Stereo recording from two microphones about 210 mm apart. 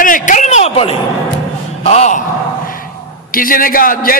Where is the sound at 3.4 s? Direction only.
40° left (ahead or behind).